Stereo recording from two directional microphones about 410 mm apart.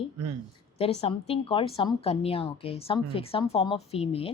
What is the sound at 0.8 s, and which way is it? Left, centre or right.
A woman's voice, centre.